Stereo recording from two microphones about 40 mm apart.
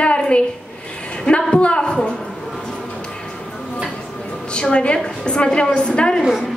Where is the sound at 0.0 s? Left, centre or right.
Left.